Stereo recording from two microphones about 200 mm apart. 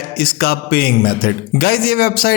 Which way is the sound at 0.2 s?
50° left (ahead or behind).